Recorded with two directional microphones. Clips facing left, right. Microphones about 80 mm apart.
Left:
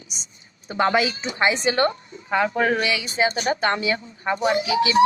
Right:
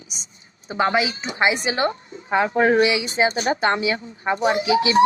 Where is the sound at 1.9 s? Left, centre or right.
Right.